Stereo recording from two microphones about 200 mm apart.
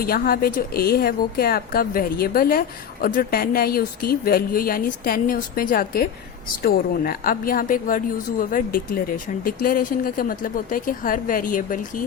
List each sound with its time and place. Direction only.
0.0 s a woman's voice: 50° left (ahead or behind)